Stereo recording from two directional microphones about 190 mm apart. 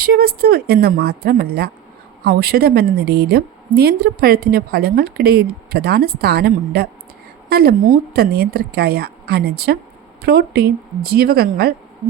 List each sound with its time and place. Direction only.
0.0 s a woman's voice: 50° right (ahead or behind)